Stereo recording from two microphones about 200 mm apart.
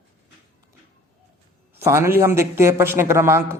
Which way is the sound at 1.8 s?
15° right (ahead or behind).